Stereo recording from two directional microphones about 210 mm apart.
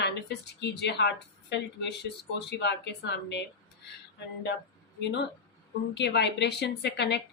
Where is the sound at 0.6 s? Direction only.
55° left (ahead or behind).